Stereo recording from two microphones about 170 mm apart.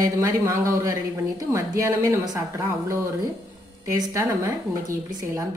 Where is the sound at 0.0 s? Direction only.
15° right (ahead or behind).